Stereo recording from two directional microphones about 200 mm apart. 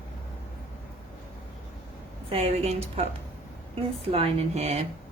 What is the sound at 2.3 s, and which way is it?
Speech, 30° right (ahead or behind).